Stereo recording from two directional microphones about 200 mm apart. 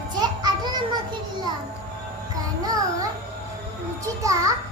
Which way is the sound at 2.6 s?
20° right (ahead or behind).